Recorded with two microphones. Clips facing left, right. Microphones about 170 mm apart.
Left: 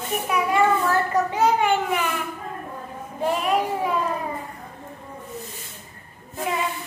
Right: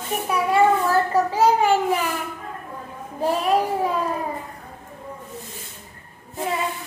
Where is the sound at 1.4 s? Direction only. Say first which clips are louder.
Right 3 dB; 35° right (ahead or behind).